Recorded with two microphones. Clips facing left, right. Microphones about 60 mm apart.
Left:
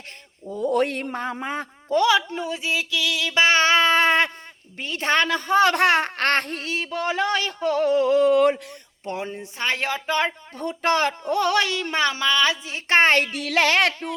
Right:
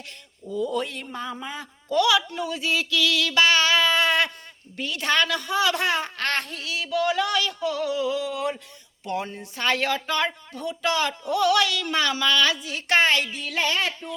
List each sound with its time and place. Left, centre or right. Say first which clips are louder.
0.5 s a man's voice: left 5 dB; left
1.9 s a sound: left 2 dB; left
4.8 s speech: left 2 dB; left
9.0 s speech: even; left
10.5 s speech: left 3 dB; left
13.4 s speech: left 6 dB; left